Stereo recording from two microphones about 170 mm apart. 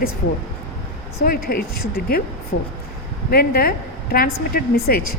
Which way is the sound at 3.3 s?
65° left (ahead or behind).